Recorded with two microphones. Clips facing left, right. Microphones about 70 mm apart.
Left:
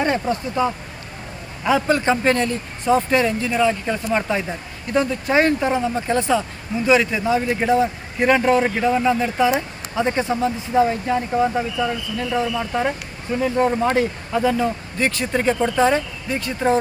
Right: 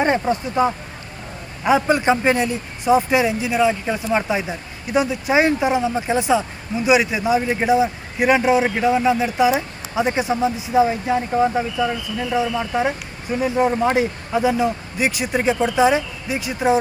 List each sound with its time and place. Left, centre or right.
0.0 s a man's voice: right